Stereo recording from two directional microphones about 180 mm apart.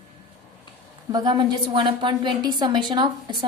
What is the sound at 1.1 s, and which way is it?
A woman's voice, 25° right (ahead or behind).